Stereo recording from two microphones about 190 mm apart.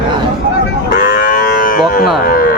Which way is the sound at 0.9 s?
50° left (ahead or behind).